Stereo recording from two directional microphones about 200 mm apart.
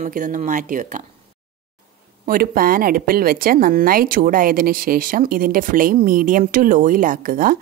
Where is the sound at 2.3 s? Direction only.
45° right (ahead or behind).